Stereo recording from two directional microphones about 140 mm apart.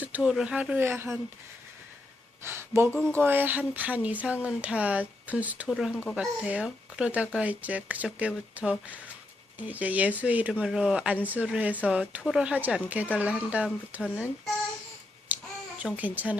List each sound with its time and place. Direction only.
0.0 s speech: 10° right (ahead or behind)
2.4 s a sound: 15° right (ahead or behind)
3.1 s speech: 15° right (ahead or behind)
15.3 s babbling: 10° right (ahead or behind)
15.8 s speech: 10° right (ahead or behind)